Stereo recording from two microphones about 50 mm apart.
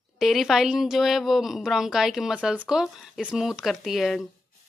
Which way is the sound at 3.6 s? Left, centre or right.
Centre.